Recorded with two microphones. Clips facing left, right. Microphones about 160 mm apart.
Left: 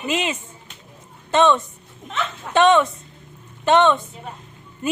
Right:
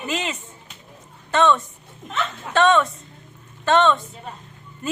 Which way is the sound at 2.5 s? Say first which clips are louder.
Left 2 dB; 20° left (ahead or behind).